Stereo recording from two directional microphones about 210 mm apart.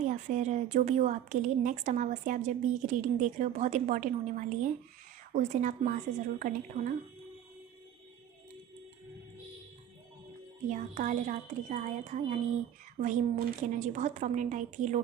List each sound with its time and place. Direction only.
0.0 s a woman's voice: 35° right (ahead or behind)
10.7 s a woman's voice: 35° right (ahead or behind)